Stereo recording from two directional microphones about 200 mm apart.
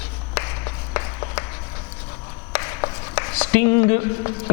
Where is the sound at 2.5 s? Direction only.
15° left (ahead or behind).